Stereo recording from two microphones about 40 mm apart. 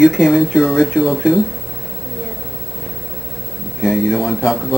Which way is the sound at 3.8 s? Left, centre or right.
Centre.